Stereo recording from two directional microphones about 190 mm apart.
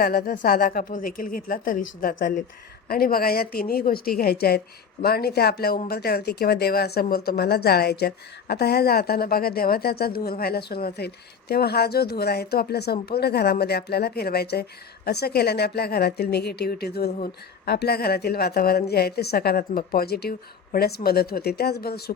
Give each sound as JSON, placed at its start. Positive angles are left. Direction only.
{"t": 0.0, "sound": "a woman's voice", "side_deg": 55}